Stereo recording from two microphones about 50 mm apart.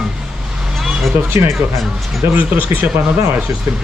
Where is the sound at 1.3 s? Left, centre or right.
Right.